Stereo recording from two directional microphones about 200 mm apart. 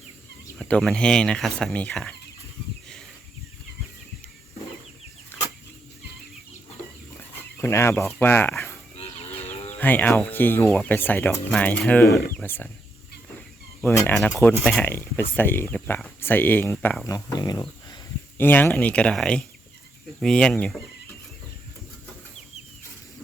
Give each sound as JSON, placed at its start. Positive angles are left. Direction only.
{"t": 0.6, "sound": "speech", "side_deg": 0}
{"t": 7.6, "sound": "speech", "side_deg": 15}
{"t": 9.0, "sound": "livestock", "side_deg": 30}
{"t": 9.6, "sound": "speech", "side_deg": 10}
{"t": 13.8, "sound": "speech", "side_deg": 10}
{"t": 18.3, "sound": "speech", "side_deg": 10}